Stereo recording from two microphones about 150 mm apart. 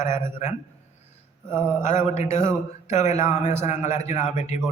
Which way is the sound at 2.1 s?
45° left (ahead or behind).